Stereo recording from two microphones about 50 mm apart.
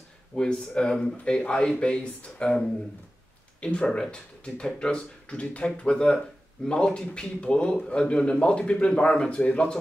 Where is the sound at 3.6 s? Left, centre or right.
Left.